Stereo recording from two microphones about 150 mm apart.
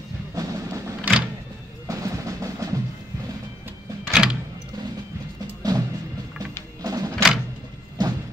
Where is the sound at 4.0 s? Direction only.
5° right (ahead or behind).